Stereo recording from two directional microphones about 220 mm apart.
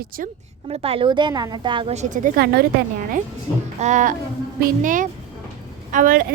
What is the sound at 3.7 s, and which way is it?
A woman's voice, 30° right (ahead or behind).